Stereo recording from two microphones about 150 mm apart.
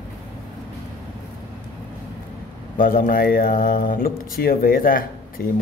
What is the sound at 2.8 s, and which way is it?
Speech, 70° left (ahead or behind).